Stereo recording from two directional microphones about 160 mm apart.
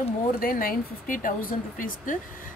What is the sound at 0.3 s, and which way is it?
Speech, 65° left (ahead or behind).